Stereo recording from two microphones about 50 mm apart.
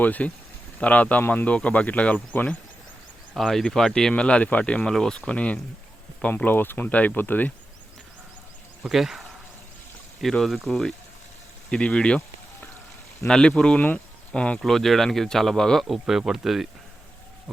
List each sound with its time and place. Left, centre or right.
0.0 s speech: left
3.3 s speech: centre
4.1 s speech: left
4.9 s speech: centre
6.2 s speech: left
6.9 s speech: left
8.8 s speech: centre
10.2 s speech: centre; by 12.2 s left
13.2 s speech: centre
13.7 s speech: left
14.3 s speech: left
14.6 s speech: centre
15.9 s speech: centre